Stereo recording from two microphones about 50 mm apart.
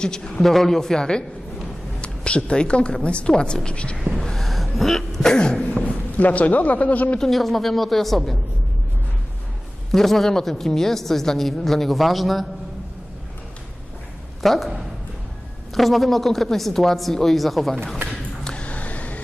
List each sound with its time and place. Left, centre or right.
0.0 s a man's voice: centre
0.4 s a man's voice: centre; by 3.9 s left
4.2 s sneeze: centre
5.8 s speech: left
7.2 s a woman's voice: centre
9.9 s a woman's voice: centre
14.4 s a woman's voice: centre
15.7 s a woman's voice: centre
18.1 s a sound: left